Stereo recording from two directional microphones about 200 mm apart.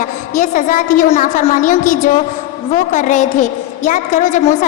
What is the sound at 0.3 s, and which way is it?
A woman's voice, 40° left (ahead or behind).